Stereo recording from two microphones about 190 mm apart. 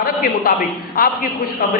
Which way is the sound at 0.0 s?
50° left (ahead or behind).